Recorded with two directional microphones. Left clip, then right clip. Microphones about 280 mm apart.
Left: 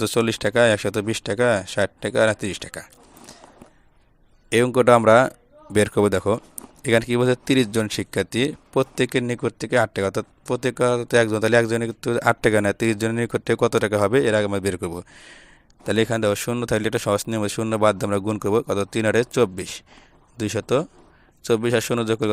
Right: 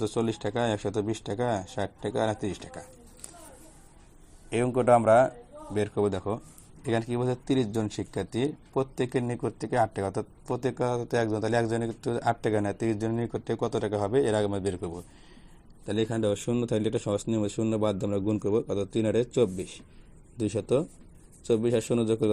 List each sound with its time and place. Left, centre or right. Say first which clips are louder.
0.0 s speech: left 8 dB; left
4.5 s speech: left 7 dB; left
10.8 s speech: left 12 dB; left
11.1 s speech: left 10 dB; left
14.3 s speech: left 7 dB; left
14.5 s speech: left 7 dB; left
14.8 s speech: left 7 dB; left